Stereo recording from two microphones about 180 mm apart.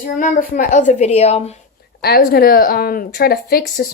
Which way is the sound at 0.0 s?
50° left (ahead or behind).